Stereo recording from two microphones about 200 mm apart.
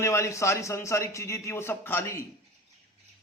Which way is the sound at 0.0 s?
15° left (ahead or behind).